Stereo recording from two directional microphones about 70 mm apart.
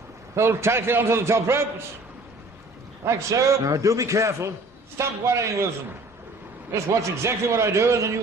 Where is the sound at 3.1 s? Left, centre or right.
Right.